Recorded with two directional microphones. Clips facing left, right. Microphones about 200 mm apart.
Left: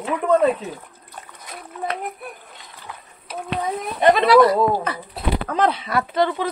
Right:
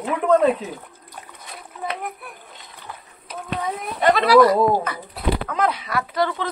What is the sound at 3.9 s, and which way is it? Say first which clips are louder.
Speech: left 1 dB; 25° left (ahead or behind).